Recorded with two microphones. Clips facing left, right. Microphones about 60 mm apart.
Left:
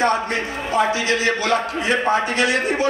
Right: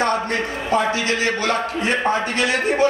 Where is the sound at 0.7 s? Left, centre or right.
Right.